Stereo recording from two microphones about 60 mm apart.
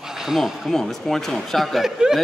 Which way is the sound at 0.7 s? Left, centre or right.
Centre.